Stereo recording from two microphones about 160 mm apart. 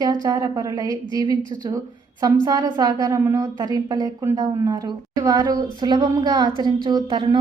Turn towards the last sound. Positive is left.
turn(degrees=-30)  # may be behind; listen again after turning